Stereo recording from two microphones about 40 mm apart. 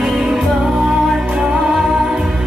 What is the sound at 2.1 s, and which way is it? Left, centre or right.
Music, right.